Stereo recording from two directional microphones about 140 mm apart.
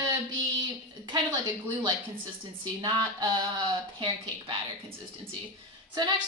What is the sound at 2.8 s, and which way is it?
Speech, 35° right (ahead or behind).